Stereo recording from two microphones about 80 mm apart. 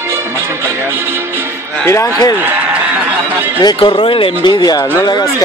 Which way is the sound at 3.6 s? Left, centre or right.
Left.